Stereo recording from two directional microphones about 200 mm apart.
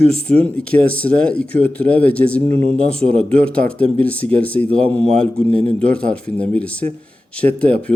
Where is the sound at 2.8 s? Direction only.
5° left (ahead or behind).